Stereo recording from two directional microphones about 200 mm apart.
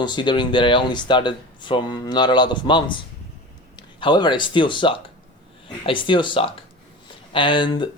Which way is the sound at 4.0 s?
25° left (ahead or behind).